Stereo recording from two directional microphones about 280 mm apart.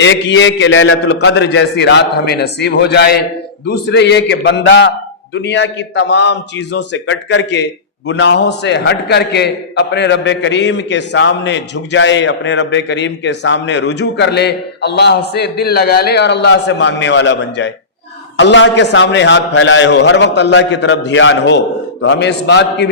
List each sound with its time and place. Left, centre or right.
0.0 s a man's voice: left